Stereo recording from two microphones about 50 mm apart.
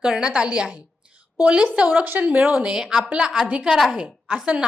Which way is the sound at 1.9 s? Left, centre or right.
Right.